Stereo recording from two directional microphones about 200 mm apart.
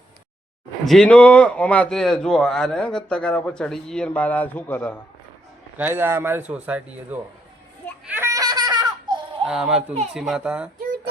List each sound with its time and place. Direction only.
0.9 s a man's voice: 5° left (ahead or behind)
5.7 s speech: 10° right (ahead or behind)
8.0 s laughter: 10° right (ahead or behind)
9.5 s a man's voice: 5° right (ahead or behind)